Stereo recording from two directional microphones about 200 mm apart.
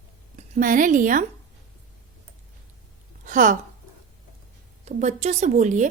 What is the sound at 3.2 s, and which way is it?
Speech, 40° right (ahead or behind).